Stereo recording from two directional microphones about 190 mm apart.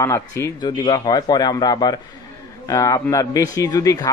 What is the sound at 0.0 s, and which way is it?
A man's voice, 15° left (ahead or behind).